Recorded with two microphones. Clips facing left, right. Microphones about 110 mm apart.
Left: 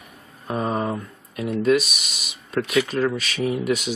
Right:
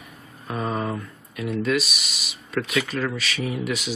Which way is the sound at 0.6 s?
15° left (ahead or behind).